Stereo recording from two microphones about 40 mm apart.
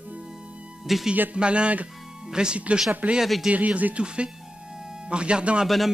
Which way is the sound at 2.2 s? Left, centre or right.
Right.